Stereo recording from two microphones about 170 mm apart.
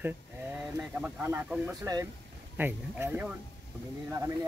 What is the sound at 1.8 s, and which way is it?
Speech, 20° right (ahead or behind).